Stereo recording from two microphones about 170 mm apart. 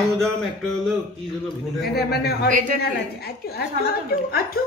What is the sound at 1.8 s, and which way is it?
Speech, 70° left (ahead or behind).